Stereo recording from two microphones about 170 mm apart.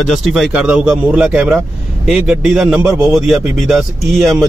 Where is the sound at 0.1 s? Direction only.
Centre (ahead or behind).